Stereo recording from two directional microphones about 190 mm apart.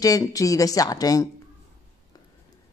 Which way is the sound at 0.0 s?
20° left (ahead or behind).